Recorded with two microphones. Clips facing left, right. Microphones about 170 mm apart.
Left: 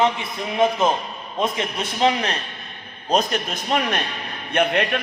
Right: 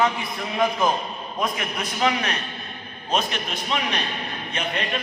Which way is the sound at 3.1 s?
40° left (ahead or behind).